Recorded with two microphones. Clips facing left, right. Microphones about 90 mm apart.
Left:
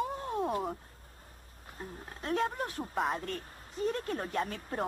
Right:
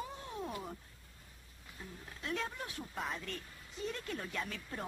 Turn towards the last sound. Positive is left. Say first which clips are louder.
# left 8 dB
turn(degrees=45)  # may be behind; listen again after turning